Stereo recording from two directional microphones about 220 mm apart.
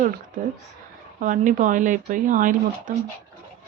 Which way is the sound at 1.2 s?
35° right (ahead or behind).